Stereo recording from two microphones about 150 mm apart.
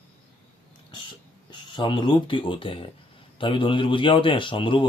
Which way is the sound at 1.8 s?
30° left (ahead or behind).